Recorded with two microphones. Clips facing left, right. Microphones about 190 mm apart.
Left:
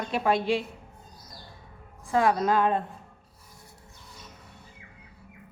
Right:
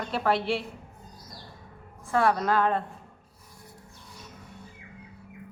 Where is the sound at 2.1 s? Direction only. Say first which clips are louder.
Left 1 dB; 15° left (ahead or behind).